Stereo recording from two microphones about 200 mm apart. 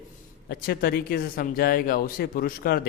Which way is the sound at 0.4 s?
50° left (ahead or behind).